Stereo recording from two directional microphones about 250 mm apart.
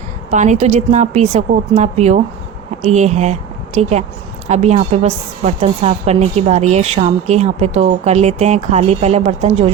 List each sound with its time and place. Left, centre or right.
0.3 s a woman's voice: right